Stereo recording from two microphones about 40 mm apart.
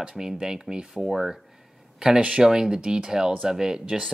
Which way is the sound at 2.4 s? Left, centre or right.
Centre.